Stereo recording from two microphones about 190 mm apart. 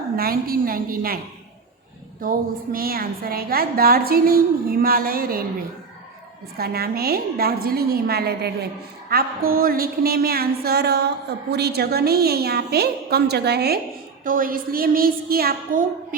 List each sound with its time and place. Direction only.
0.2 s a woman's voice: 50° right (ahead or behind)
2.2 s a woman's voice: 50° right (ahead or behind)
6.6 s a woman's voice: 55° right (ahead or behind)
14.3 s a woman's voice: 45° right (ahead or behind)